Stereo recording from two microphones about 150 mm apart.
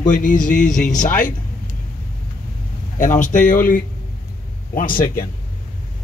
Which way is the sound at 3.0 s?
60° left (ahead or behind).